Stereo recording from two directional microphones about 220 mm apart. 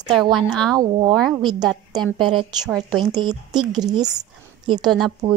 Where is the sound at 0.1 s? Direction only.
Centre (ahead or behind).